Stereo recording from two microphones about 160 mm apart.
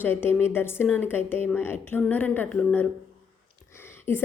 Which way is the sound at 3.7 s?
15° left (ahead or behind).